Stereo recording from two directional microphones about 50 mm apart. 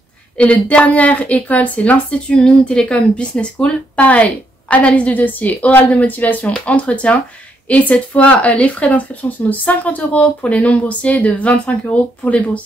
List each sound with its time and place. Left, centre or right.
0.4 s speech: left